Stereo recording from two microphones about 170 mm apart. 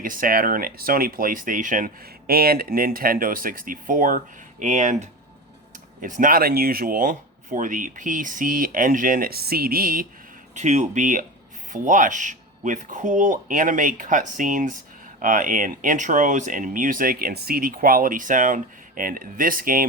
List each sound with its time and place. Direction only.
0.0 s speech: 55° right (ahead or behind)
10.5 s speech: 45° right (ahead or behind)